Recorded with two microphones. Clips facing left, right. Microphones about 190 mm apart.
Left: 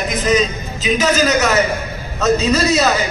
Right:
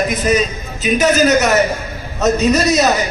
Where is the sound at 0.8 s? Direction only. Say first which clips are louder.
Right 3 dB; 55° right (ahead or behind).